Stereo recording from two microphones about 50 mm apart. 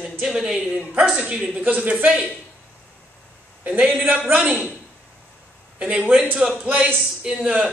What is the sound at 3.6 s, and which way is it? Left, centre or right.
A man's voice, right.